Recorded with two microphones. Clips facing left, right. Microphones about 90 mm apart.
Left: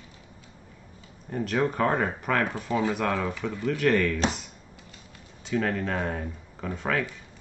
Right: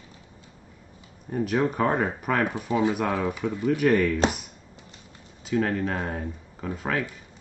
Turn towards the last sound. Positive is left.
turn(degrees=-5)  # may be behind; listen again after turning